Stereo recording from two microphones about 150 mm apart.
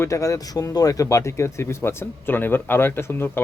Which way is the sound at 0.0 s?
20° left (ahead or behind).